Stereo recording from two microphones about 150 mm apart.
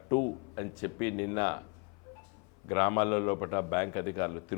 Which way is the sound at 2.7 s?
15° left (ahead or behind).